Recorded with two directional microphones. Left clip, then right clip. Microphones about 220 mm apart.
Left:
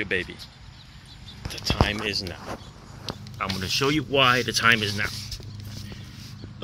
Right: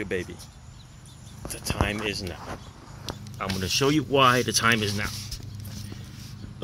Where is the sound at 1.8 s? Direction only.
5° right (ahead or behind).